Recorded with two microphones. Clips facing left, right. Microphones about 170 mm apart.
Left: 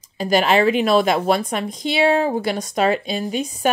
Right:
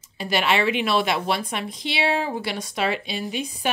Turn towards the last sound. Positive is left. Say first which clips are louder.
# left 5 dB
turn(degrees=45)  # may be behind; listen again after turning